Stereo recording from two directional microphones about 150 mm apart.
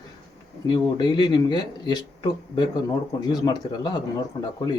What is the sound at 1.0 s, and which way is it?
Speech, 30° left (ahead or behind).